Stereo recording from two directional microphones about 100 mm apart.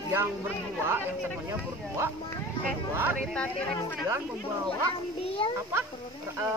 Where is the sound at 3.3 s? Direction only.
10° left (ahead or behind).